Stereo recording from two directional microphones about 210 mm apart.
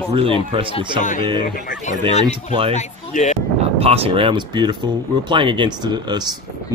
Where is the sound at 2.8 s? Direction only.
35° left (ahead or behind).